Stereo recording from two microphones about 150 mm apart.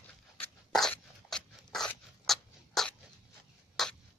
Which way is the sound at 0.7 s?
Centre (ahead or behind).